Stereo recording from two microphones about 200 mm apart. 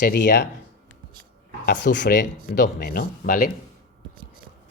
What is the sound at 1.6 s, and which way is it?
Speech, 60° left (ahead or behind).